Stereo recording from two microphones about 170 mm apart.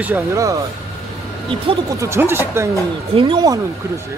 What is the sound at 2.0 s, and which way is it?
Speech, 15° right (ahead or behind).